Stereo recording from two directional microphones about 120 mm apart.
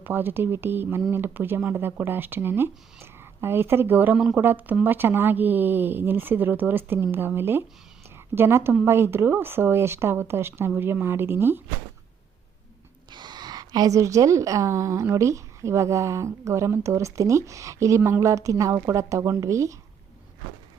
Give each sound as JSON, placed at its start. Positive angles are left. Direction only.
{"t": 0.0, "sound": "a woman's voice", "side_deg": -15}
{"t": 13.1, "sound": "a woman's voice", "side_deg": -40}